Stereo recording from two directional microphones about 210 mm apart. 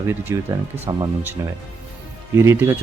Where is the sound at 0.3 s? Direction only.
15° right (ahead or behind).